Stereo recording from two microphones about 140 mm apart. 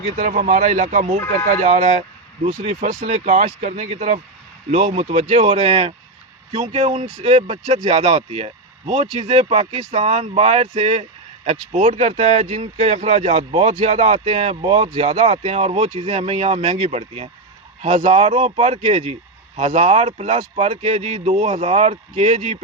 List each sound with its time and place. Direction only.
0.2 s speech: 65° right (ahead or behind); by 22.5 s 50° right (ahead or behind)